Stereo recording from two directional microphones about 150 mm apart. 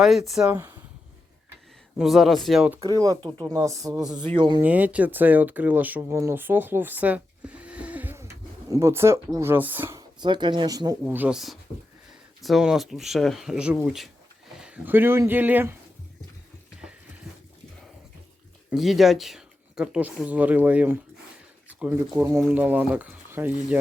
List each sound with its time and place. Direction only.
0.0 s speech: centre (ahead or behind)
0.5 s speech: 15° right (ahead or behind)
2.0 s speech: centre (ahead or behind)
2.8 s speech: 25° right (ahead or behind)
4.6 s speech: 10° right (ahead or behind)
9.9 s speech: 30° right (ahead or behind)
11.0 s speech: 10° right (ahead or behind)
18.7 s speech: centre (ahead or behind)
22.1 s speech: 20° right (ahead or behind)